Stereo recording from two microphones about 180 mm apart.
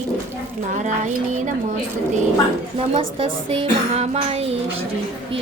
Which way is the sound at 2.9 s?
30° right (ahead or behind).